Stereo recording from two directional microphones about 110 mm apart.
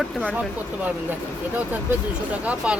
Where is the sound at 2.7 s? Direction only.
10° right (ahead or behind).